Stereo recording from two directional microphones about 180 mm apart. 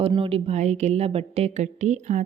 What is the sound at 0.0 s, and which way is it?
Speech, 30° right (ahead or behind).